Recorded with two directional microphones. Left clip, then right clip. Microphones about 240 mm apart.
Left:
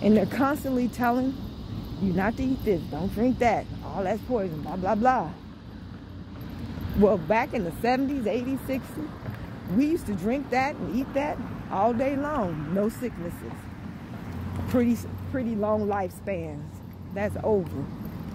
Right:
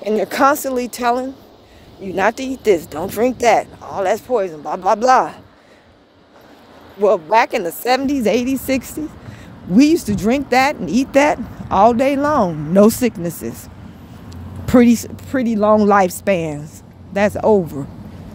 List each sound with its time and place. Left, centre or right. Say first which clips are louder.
0.2 s speech: right 11 dB; right
7.0 s speech: right 9 dB; right
14.7 s speech: right 13 dB; right